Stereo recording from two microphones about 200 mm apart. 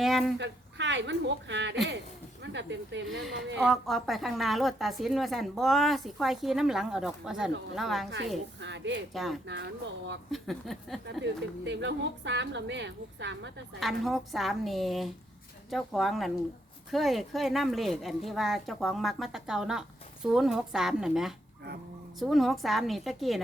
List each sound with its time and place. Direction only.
0.0 s a woman's voice: centre (ahead or behind)
0.3 s a woman's voice: 60° right (ahead or behind)
3.6 s a woman's voice: centre (ahead or behind)
8.6 s a woman's voice: 60° right (ahead or behind)
9.1 s a woman's voice: centre (ahead or behind)
11.0 s a woman's voice: 60° right (ahead or behind)
13.7 s a woman's voice: centre (ahead or behind)